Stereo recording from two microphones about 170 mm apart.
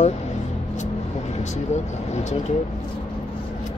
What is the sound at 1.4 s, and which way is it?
Speech, 45° left (ahead or behind).